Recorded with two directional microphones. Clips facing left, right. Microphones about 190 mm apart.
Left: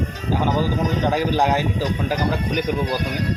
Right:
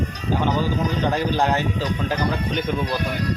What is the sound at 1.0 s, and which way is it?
Speech, 10° left (ahead or behind).